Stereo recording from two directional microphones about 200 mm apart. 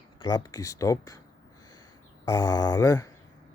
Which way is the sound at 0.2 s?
20° left (ahead or behind).